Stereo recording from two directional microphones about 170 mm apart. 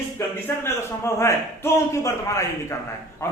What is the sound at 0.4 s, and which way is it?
A man's voice, 15° left (ahead or behind).